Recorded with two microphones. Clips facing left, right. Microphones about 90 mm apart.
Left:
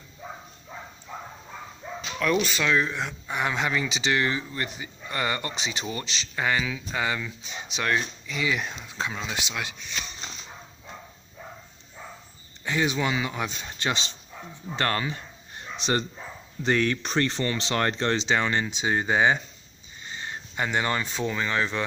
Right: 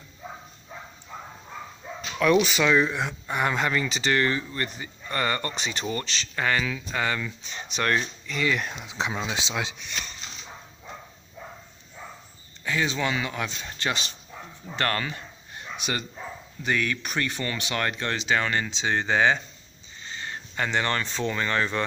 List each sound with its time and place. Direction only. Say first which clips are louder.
2.1 s speech: right 4 dB; 5° right (ahead or behind)
8.8 s speech: right 2 dB; 15° right (ahead or behind)
12.6 s speech: left 1 dB; 20° left (ahead or behind)
15.8 s speech: left 5 dB; 35° left (ahead or behind); by 21.8 s 5° left (ahead or behind)